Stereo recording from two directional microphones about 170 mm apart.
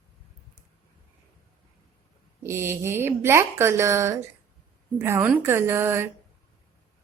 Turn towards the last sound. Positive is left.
turn(degrees=-15)  # may be behind; listen again after turning